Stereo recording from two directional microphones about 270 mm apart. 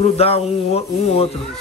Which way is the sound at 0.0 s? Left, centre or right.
Left.